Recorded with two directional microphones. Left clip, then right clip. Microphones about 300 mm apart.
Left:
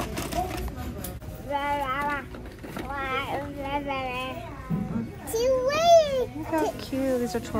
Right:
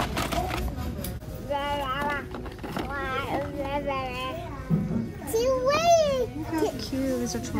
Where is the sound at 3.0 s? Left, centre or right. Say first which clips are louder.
Left 1 dB; left.